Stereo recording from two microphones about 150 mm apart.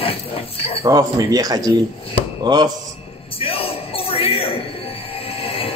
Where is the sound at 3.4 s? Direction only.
40° left (ahead or behind).